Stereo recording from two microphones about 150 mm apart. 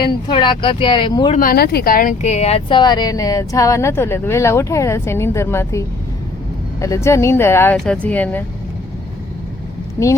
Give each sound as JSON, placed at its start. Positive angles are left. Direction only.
{"t": 0.0, "sound": "speech", "side_deg": 35}
{"t": 1.4, "sound": "speech", "side_deg": 80}
{"t": 2.2, "sound": "speech", "side_deg": 45}
{"t": 6.8, "sound": "speech", "side_deg": 20}